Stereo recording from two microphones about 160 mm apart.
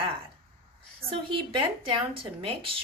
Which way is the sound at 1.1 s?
35° right (ahead or behind).